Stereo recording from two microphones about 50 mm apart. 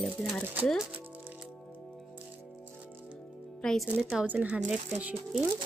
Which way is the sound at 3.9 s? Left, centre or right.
Right.